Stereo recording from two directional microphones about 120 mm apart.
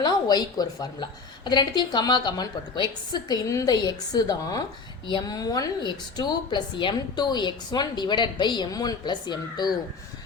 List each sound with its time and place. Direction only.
0.0 s a woman's voice: 35° left (ahead or behind)